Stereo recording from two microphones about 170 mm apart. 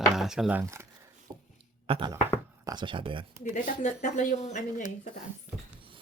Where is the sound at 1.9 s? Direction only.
30° right (ahead or behind).